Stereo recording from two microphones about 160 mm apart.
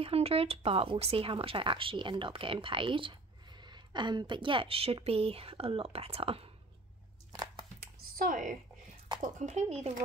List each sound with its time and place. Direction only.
0.0 s speech: 35° right (ahead or behind)
7.8 s computer keyboard: 60° right (ahead or behind)
9.2 s speech: 45° right (ahead or behind)